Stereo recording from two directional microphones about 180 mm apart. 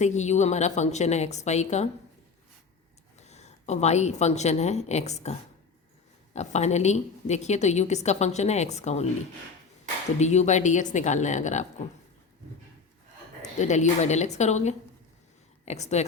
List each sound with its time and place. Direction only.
0.0 s a woman's voice: 40° left (ahead or behind)
3.2 s a woman's voice: 40° left (ahead or behind)
10.2 s a woman's voice: 40° left (ahead or behind)
13.4 s a woman's voice: 40° left (ahead or behind)